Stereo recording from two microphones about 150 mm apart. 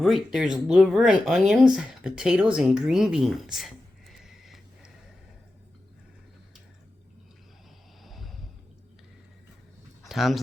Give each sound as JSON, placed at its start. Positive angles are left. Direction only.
{"t": 0.0, "sound": "speech", "side_deg": 0}
{"t": 8.0, "sound": "a sound", "side_deg": 0}
{"t": 10.0, "sound": "speech", "side_deg": 0}